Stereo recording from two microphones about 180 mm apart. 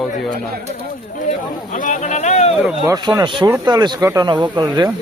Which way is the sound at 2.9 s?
20° right (ahead or behind).